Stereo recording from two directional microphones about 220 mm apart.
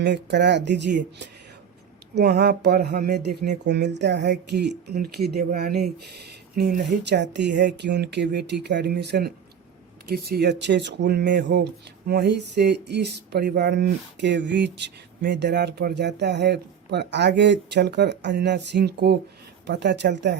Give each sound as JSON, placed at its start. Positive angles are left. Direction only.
{"t": 0.0, "sound": "speech", "side_deg": -50}